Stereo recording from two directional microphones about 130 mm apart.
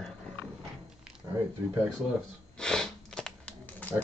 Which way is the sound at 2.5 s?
5° left (ahead or behind).